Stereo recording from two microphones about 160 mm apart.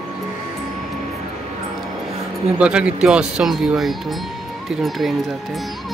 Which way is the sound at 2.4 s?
5° right (ahead or behind).